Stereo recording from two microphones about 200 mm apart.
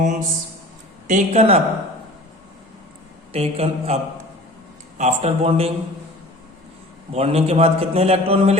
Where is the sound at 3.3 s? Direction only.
30° right (ahead or behind).